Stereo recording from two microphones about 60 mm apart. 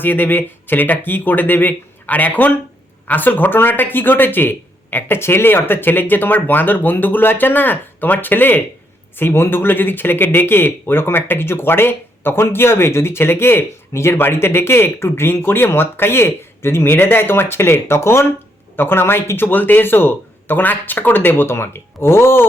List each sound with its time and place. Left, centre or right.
0.0 s speech: left